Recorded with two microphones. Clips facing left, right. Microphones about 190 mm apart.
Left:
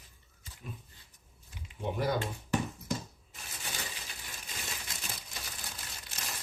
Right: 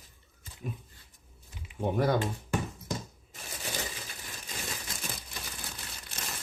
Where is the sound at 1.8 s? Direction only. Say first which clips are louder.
Right 5 dB; 50° right (ahead or behind).